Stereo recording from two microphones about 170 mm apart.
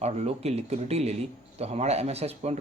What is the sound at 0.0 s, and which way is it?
A man's voice, 40° right (ahead or behind).